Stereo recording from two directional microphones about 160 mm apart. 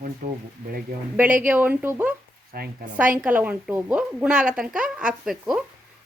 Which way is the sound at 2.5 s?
70° right (ahead or behind).